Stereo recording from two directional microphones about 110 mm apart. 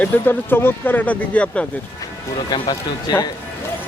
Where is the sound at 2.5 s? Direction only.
40° left (ahead or behind).